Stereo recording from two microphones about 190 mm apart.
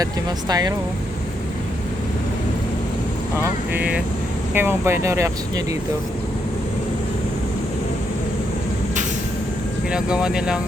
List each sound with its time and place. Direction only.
0.0 s speech: 20° right (ahead or behind)
3.7 s speech: 10° right (ahead or behind)
9.9 s speech: 5° right (ahead or behind)